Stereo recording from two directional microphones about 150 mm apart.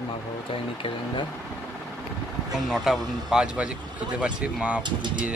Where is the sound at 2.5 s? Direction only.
Centre (ahead or behind).